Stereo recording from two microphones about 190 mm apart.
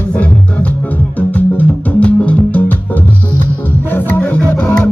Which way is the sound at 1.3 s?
10° left (ahead or behind).